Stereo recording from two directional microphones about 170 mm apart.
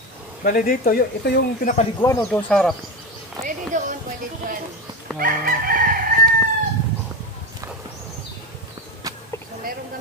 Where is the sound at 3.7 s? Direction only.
50° right (ahead or behind).